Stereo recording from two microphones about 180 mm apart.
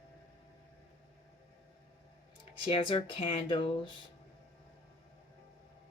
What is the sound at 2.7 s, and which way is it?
Speech, 25° left (ahead or behind).